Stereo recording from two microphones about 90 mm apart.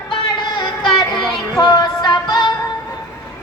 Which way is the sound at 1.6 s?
55° left (ahead or behind).